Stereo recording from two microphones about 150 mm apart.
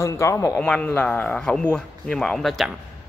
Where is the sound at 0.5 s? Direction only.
5° left (ahead or behind).